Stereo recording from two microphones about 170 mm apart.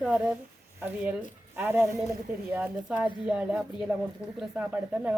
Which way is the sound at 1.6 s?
15° right (ahead or behind).